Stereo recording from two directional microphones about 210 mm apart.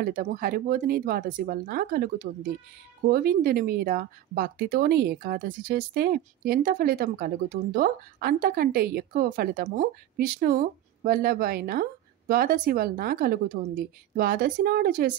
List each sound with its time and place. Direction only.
0.0 s speech: 45° right (ahead or behind)